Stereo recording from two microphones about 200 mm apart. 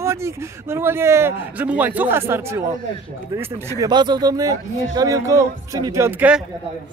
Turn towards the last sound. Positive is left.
turn(degrees=-5)  # may be behind; listen again after turning